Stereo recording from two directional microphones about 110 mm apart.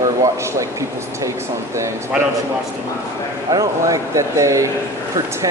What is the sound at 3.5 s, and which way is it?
Speech, 35° right (ahead or behind).